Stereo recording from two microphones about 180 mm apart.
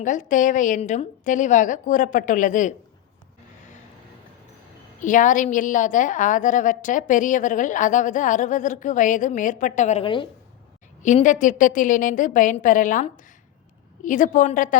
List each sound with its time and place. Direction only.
0.0 s a woman's voice: 45° left (ahead or behind)
4.9 s a woman's voice: 45° left (ahead or behind); by 10.2 s 30° left (ahead or behind)
11.0 s a woman's voice: 45° left (ahead or behind)